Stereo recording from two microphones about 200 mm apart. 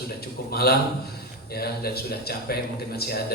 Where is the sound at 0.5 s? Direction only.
50° left (ahead or behind).